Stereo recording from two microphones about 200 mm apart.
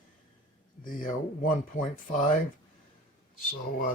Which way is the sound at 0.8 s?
45° left (ahead or behind).